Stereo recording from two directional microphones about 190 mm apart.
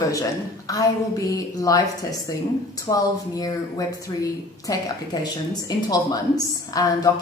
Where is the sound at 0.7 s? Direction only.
20° left (ahead or behind).